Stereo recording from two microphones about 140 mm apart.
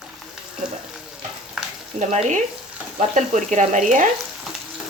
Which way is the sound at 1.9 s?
60° right (ahead or behind).